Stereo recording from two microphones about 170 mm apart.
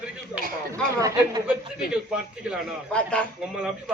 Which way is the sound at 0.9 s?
20° right (ahead or behind).